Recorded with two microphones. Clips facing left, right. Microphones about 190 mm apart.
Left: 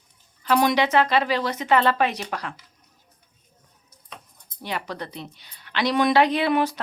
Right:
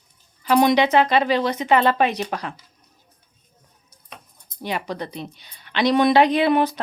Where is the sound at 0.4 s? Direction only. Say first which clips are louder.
Right 4 dB; 20° right (ahead or behind).